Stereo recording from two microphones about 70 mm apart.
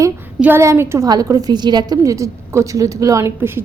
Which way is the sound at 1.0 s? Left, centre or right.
Right.